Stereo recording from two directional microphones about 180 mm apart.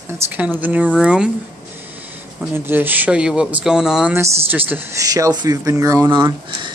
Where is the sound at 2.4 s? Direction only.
10° right (ahead or behind).